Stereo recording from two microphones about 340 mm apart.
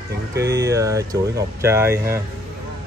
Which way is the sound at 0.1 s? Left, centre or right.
Right.